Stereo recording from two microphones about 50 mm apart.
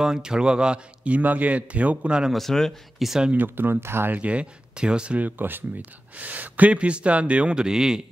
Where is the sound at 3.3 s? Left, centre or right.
Right.